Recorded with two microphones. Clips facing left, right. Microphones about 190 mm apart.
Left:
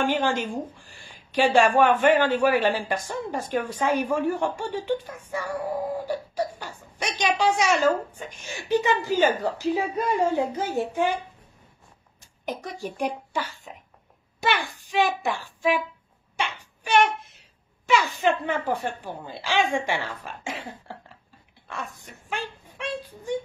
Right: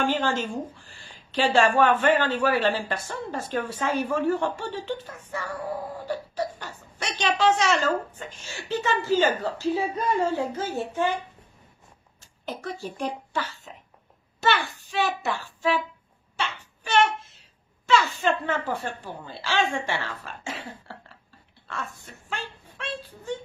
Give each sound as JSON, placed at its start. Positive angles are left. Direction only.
{"t": 0.0, "sound": "a woman's voice", "side_deg": 15}
{"t": 12.2, "sound": "a woman's voice", "side_deg": 15}
{"t": 16.3, "sound": "a sound", "side_deg": 15}
{"t": 17.8, "sound": "a woman's voice", "side_deg": 15}